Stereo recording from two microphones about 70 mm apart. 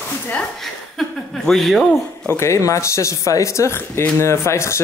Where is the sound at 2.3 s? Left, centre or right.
Left.